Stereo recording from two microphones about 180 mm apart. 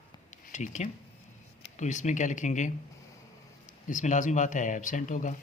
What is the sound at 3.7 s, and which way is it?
Speech, 45° left (ahead or behind).